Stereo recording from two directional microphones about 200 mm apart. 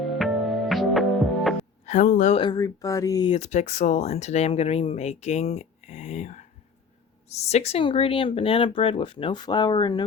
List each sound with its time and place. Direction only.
0.0 s music: centre (ahead or behind)
1.8 s speech: 40° left (ahead or behind)
2.4 s speech: 20° left (ahead or behind)
3.3 s speech: 35° left (ahead or behind)